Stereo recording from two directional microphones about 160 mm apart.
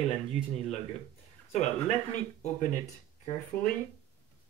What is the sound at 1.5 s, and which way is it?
Speech, 45° left (ahead or behind).